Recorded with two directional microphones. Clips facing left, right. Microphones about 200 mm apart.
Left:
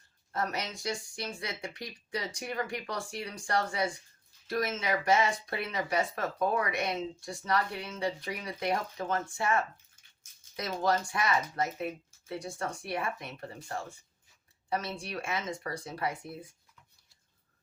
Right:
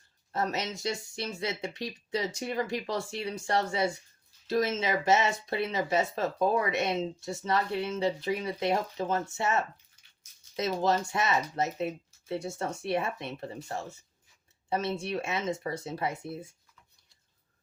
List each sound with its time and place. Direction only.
0.3 s speech: 25° right (ahead or behind)